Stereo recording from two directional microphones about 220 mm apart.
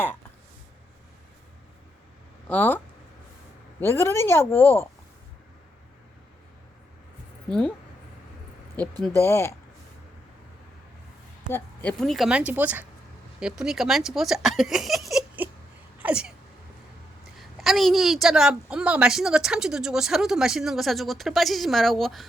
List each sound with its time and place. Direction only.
2.5 s a woman's voice: 10° left (ahead or behind)
9.1 s a woman's voice: 10° left (ahead or behind)
11.5 s a woman's voice: 5° left (ahead or behind)
16.0 s a sound: 5° right (ahead or behind)
17.6 s a woman's voice: centre (ahead or behind)